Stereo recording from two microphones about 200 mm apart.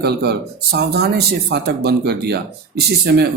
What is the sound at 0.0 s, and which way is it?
Speech, 55° right (ahead or behind).